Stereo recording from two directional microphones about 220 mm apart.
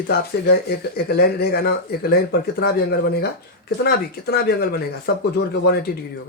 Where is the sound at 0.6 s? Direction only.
45° left (ahead or behind).